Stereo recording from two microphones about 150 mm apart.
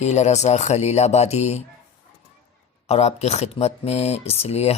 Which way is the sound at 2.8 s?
45° left (ahead or behind).